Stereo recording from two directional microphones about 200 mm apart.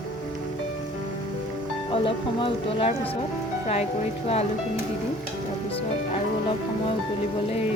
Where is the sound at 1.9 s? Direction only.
25° left (ahead or behind).